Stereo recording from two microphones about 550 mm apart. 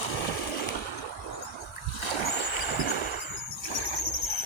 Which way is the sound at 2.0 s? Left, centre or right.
Left.